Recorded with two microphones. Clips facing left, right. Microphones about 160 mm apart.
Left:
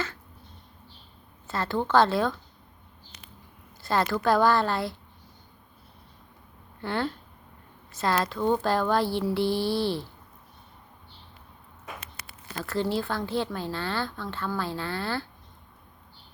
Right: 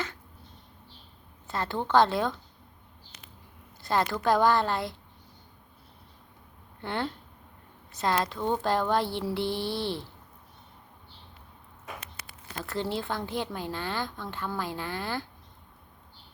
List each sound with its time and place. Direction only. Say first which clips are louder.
1.5 s a woman's voice: left 3 dB; 20° right (ahead or behind)
3.8 s a woman's voice: left 2 dB; 20° right (ahead or behind)
6.8 s a woman's voice: left 3 dB; 20° right (ahead or behind)
12.5 s speech: left 4 dB; 20° right (ahead or behind)